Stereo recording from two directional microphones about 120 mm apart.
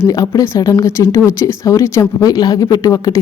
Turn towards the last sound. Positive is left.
turn(degrees=30)  # may be behind; listen again after turning